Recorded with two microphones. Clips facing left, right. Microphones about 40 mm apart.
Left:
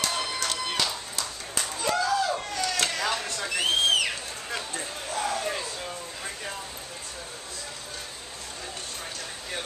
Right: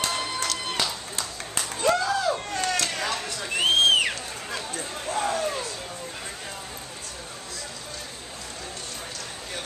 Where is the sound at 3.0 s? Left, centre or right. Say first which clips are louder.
Left 1 dB; centre.